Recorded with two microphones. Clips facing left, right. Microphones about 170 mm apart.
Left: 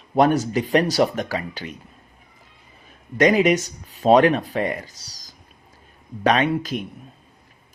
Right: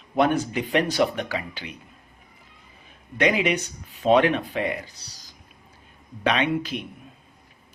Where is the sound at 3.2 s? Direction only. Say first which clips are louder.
Left 6 dB; 40° left (ahead or behind).